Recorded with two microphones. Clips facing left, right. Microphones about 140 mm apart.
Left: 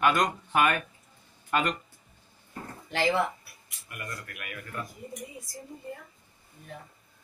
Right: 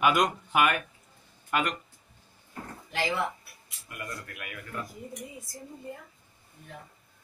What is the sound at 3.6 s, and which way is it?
Speech, 25° right (ahead or behind).